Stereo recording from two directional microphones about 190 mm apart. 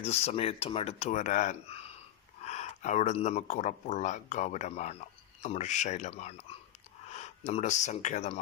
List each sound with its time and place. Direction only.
0.0 s speech: 35° left (ahead or behind)